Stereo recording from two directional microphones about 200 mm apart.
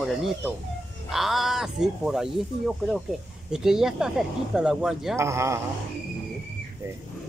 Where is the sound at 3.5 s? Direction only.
Centre (ahead or behind).